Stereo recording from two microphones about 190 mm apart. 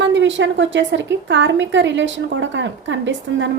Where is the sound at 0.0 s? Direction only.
75° right (ahead or behind).